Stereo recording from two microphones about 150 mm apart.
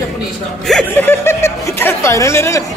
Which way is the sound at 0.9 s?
15° left (ahead or behind).